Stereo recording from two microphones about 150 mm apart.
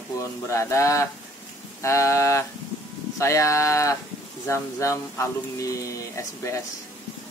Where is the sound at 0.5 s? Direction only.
20° left (ahead or behind).